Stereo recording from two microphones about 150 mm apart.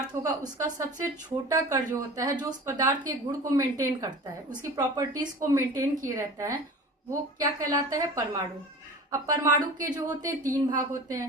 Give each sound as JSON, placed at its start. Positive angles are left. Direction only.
{"t": 0.1, "sound": "speech", "side_deg": -20}